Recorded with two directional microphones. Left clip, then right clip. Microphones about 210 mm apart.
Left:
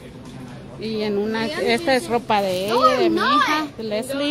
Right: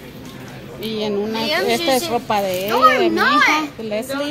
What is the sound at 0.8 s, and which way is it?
Speech, 5° left (ahead or behind).